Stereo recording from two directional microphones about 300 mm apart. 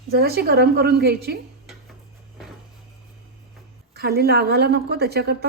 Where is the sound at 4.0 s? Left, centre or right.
Right.